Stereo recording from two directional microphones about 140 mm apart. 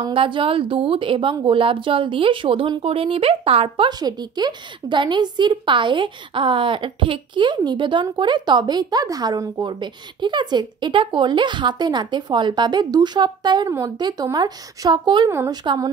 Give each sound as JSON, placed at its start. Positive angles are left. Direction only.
{"t": 0.0, "sound": "a woman's voice", "side_deg": -40}
{"t": 15.2, "sound": "a woman's voice", "side_deg": -20}
{"t": 15.6, "sound": "a woman's voice", "side_deg": -35}